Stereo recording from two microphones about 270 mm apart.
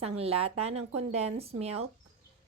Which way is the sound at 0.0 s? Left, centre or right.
Right.